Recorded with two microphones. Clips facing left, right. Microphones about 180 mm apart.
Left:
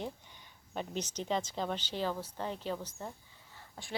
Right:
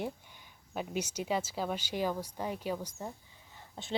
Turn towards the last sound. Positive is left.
turn(degrees=-20)  # may be behind; listen again after turning